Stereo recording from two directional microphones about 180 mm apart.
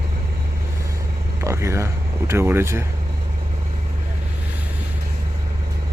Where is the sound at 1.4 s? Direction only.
15° right (ahead or behind).